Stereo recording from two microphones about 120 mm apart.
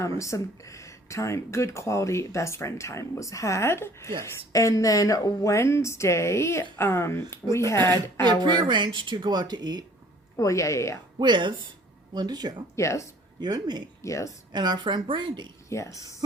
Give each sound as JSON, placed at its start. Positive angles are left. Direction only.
{"t": 0.2, "sound": "speech", "side_deg": 25}
{"t": 7.8, "sound": "speech", "side_deg": -35}
{"t": 10.3, "sound": "speech", "side_deg": 25}
{"t": 11.2, "sound": "speech", "side_deg": -40}
{"t": 12.7, "sound": "speech", "side_deg": 25}
{"t": 13.4, "sound": "speech", "side_deg": -35}
{"t": 14.0, "sound": "speech", "side_deg": 25}
{"t": 14.5, "sound": "speech", "side_deg": -40}
{"t": 15.7, "sound": "speech", "side_deg": 25}